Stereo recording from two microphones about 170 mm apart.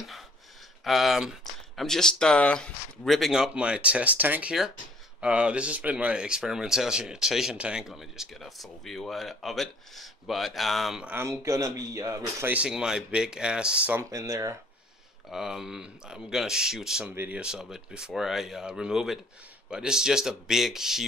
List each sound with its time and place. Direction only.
0.8 s speech: centre (ahead or behind)
14.0 s speech: 20° right (ahead or behind)
15.2 s speech: 5° right (ahead or behind)